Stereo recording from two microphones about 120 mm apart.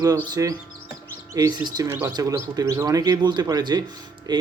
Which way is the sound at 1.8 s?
20° right (ahead or behind).